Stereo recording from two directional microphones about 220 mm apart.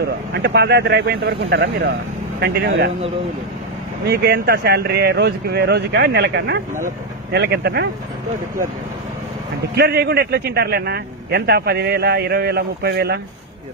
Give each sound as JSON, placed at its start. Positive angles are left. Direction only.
{"t": 0.0, "sound": "a man's voice", "side_deg": -50}
{"t": 4.1, "sound": "a man's voice", "side_deg": -45}
{"t": 9.8, "sound": "a man's voice", "side_deg": -45}